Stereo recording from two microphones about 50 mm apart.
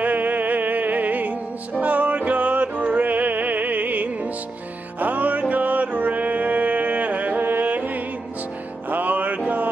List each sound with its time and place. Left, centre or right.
0.0 s music: right